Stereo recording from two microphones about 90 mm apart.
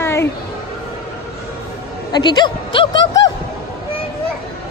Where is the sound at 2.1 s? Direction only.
55° left (ahead or behind).